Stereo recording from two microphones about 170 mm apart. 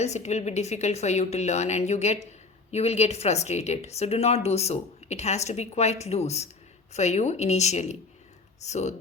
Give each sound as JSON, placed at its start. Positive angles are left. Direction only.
{"t": 0.0, "sound": "a woman's voice", "side_deg": 40}